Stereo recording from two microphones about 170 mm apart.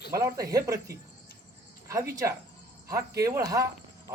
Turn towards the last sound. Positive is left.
turn(degrees=-20)  # may be behind; listen again after turning